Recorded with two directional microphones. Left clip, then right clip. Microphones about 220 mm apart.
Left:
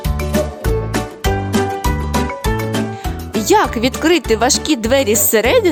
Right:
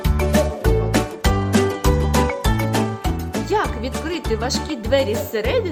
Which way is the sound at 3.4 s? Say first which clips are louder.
Left 9 dB; 50° left (ahead or behind).